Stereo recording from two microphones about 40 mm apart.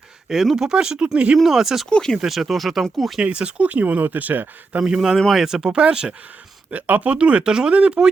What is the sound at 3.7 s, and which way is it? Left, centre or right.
Speech, right.